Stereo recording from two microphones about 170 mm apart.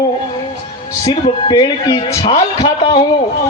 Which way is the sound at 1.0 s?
25° left (ahead or behind).